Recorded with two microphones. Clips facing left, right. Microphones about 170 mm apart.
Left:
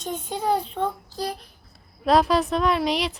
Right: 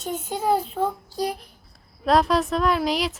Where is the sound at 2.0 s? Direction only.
Centre (ahead or behind).